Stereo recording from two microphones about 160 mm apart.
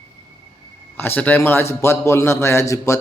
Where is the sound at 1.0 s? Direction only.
10° left (ahead or behind).